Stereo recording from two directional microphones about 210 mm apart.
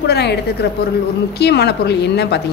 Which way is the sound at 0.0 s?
50° left (ahead or behind).